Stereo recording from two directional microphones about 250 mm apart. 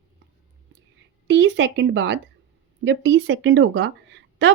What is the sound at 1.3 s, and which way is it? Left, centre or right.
Speech, right.